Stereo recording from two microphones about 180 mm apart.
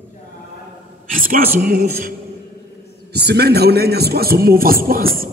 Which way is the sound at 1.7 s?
55° right (ahead or behind).